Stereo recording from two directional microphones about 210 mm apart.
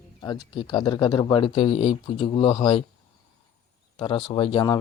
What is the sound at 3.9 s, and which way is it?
Speech, 25° left (ahead or behind).